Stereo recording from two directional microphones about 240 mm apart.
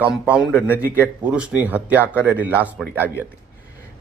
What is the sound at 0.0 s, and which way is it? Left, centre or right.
A man's voice, centre.